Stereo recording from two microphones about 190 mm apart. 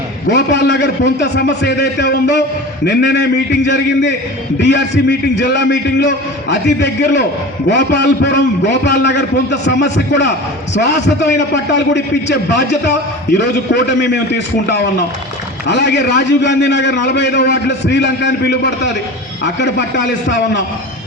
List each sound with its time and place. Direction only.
0.3 s a man's voice: 70° left (ahead or behind)
4.6 s a man's voice: 65° left (ahead or behind)
20.2 s a man's voice: 70° left (ahead or behind)